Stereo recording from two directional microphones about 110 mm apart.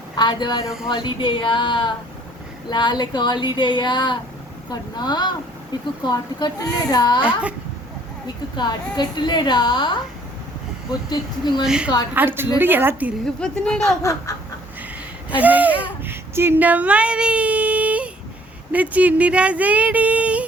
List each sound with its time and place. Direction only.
0.2 s speech: 40° left (ahead or behind)
7.2 s speech: 10° right (ahead or behind)
8.5 s speech: 40° left (ahead or behind)
11.1 s speech: 40° left (ahead or behind)
11.6 s speech: 5° right (ahead or behind)
12.1 s a woman's voice: 20° right (ahead or behind)
13.2 s a woman's voice: 5° left (ahead or behind)
14.0 s chicken: 30° left (ahead or behind)
15.3 s speech: 15° right (ahead or behind)